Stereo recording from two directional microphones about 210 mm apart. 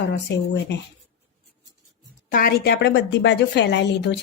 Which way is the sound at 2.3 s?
45° left (ahead or behind).